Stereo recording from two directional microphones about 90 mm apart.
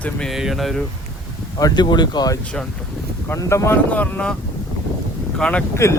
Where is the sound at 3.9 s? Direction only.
15° left (ahead or behind).